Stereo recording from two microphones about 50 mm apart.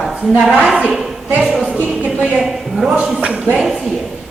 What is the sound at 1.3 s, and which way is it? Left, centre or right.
Speech, right.